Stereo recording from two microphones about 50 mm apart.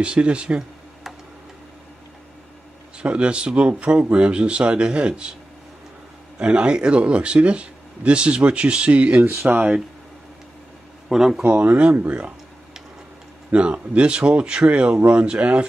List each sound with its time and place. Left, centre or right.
0.0 s speech: right
3.0 s speech: right
6.3 s speech: right
9.2 s speech: right
11.1 s speech: centre
11.4 s speech: right
13.5 s speech: right